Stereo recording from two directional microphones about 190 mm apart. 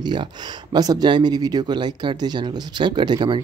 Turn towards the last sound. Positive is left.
turn(degrees=-20)  # may be behind; listen again after turning